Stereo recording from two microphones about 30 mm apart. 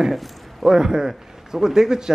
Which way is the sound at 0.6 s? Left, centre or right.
Centre.